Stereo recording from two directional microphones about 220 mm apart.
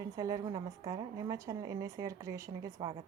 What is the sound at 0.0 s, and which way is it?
A woman's voice, 15° right (ahead or behind).